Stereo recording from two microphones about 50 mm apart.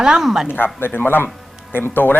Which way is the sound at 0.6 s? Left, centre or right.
Left.